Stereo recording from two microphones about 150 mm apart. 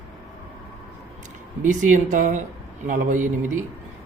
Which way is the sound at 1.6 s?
55° right (ahead or behind).